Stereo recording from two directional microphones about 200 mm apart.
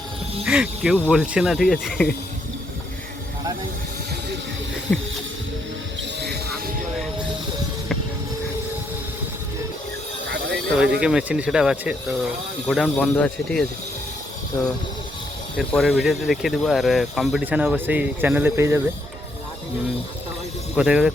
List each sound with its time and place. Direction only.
0.4 s speech: 5° right (ahead or behind)
4.9 s speech: 5° left (ahead or behind)
10.2 s a sound: 60° right (ahead or behind)
11.0 s speech: 5° right (ahead or behind)
15.5 s speech: centre (ahead or behind)
20.7 s speech: 5° right (ahead or behind)